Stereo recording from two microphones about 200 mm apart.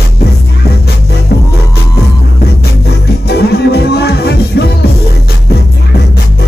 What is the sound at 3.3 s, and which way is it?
Music, 55° left (ahead or behind).